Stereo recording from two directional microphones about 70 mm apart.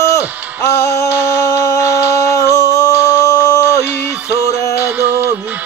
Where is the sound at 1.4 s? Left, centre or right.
Left.